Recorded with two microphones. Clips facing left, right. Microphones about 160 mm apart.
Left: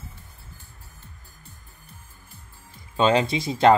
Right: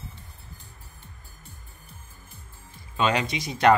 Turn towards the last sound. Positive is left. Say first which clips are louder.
# left 2 dB
turn(degrees=25)  # may be behind; listen again after turning